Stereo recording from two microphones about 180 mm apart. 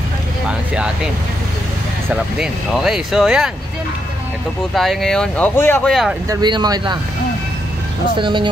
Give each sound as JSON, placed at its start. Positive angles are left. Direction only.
{"t": 2.0, "sound": "speech", "side_deg": -5}
{"t": 4.7, "sound": "speech", "side_deg": 0}
{"t": 6.2, "sound": "speech", "side_deg": -20}
{"t": 8.2, "sound": "speech", "side_deg": -25}